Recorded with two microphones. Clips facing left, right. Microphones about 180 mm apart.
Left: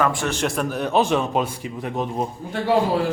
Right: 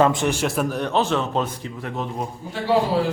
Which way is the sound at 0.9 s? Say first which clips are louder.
Left 2 dB; 15° left (ahead or behind).